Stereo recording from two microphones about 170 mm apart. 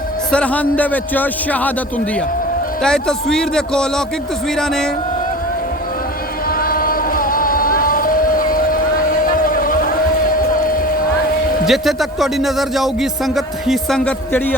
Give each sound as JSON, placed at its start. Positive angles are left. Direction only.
{"t": 0.3, "sound": "speech", "side_deg": 5}
{"t": 2.8, "sound": "a man's voice", "side_deg": 5}
{"t": 6.6, "sound": "vehicle", "side_deg": 60}
{"t": 9.2, "sound": "a sound", "side_deg": 55}
{"t": 11.6, "sound": "a man's voice", "side_deg": 0}